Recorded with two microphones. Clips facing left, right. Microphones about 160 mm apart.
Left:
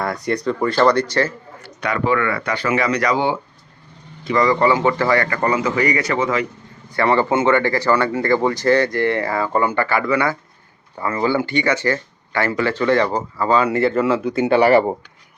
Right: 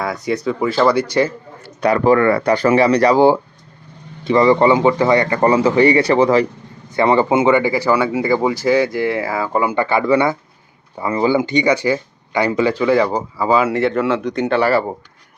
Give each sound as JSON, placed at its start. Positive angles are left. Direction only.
{"t": 0.0, "sound": "speech", "side_deg": 0}
{"t": 1.8, "sound": "a man's voice", "side_deg": -35}
{"t": 6.9, "sound": "speech", "side_deg": -20}